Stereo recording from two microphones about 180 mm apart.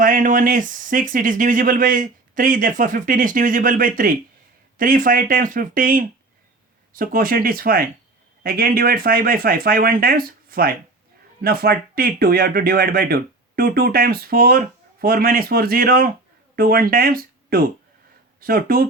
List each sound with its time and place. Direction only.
0.0 s speech: 50° right (ahead or behind)